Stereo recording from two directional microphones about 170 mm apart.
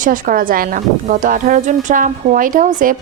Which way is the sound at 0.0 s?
55° right (ahead or behind).